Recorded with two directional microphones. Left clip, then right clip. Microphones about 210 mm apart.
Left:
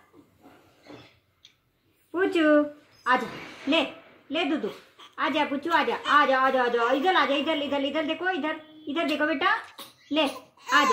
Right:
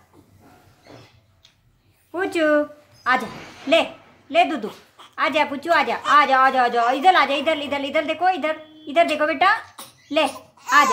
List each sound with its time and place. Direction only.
2.1 s speech: 15° right (ahead or behind)
4.3 s a woman's voice: 20° right (ahead or behind)